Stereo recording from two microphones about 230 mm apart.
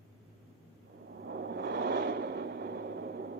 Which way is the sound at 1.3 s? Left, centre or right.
Right.